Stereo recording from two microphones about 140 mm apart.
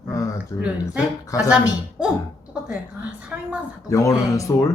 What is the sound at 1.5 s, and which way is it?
Speech, 5° right (ahead or behind).